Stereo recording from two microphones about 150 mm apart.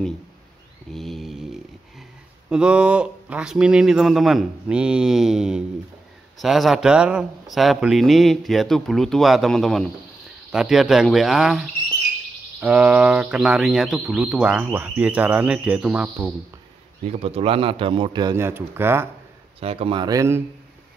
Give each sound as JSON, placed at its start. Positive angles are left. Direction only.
{"t": 0.9, "sound": "mantra", "side_deg": 0}
{"t": 2.5, "sound": "speech", "side_deg": -5}
{"t": 17.1, "sound": "a man's voice", "side_deg": -45}
{"t": 18.3, "sound": "speech", "side_deg": -15}
{"t": 19.6, "sound": "a man's voice", "side_deg": -40}